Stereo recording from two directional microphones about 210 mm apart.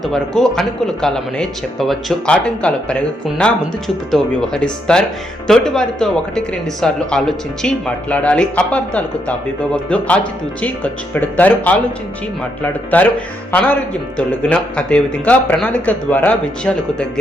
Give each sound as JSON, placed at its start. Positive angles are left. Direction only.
{"t": 0.0, "sound": "speech", "side_deg": 0}
{"t": 14.3, "sound": "speech", "side_deg": 5}